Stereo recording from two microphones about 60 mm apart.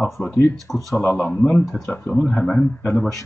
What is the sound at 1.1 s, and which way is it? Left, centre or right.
Speech, left.